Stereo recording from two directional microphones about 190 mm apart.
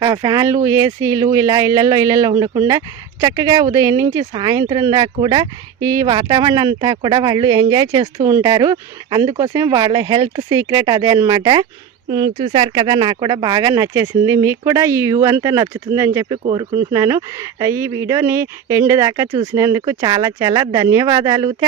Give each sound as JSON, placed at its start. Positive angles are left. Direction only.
{"t": 0.0, "sound": "speech", "side_deg": -20}
{"t": 16.4, "sound": "speech", "side_deg": -25}